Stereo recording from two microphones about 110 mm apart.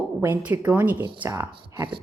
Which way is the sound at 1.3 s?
25° right (ahead or behind).